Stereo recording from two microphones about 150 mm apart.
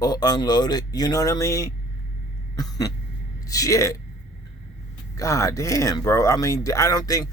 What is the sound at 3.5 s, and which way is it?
Speech, 20° left (ahead or behind).